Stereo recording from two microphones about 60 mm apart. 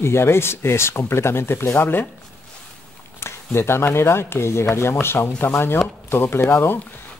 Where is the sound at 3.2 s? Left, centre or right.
Left.